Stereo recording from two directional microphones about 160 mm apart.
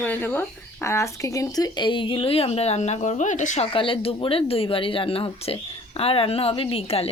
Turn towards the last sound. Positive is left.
turn(degrees=40)  # may be behind; listen again after turning